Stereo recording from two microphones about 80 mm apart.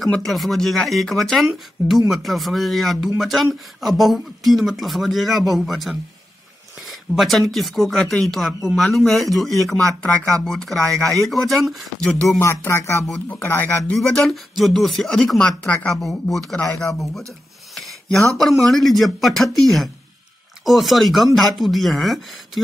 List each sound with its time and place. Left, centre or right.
0.1 s speech: centre
12.4 s speech: left
13.0 s speech: centre
13.4 s speech: left
14.0 s speech: centre
14.3 s speech: centre
16.0 s speech: centre